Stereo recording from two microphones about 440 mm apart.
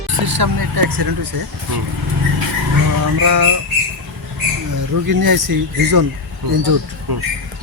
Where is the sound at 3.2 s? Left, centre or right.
Right.